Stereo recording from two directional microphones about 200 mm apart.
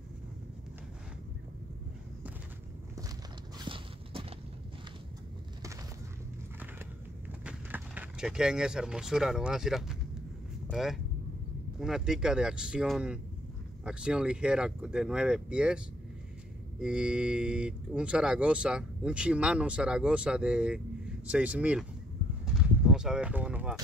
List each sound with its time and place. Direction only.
3.5 s clip-clop: 25° right (ahead or behind)
7.4 s speech: 10° right (ahead or behind)
16.8 s speech: 5° right (ahead or behind)
22.5 s a sound: 5° right (ahead or behind)